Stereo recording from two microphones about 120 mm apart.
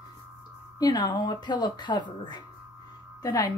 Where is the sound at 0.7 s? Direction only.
30° left (ahead or behind).